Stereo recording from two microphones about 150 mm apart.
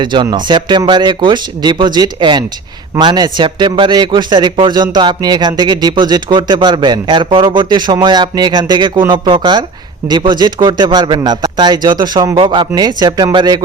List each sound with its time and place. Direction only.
0.0 s a man's voice: 30° right (ahead or behind)